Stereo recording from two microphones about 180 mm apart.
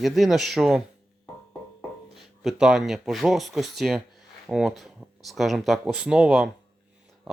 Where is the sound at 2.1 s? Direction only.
Centre (ahead or behind).